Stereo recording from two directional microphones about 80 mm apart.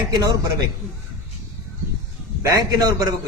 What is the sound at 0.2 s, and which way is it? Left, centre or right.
Speech, right.